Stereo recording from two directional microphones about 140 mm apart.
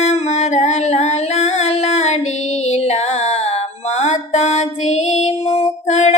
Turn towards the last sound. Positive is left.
turn(degrees=50)  # may be behind; listen again after turning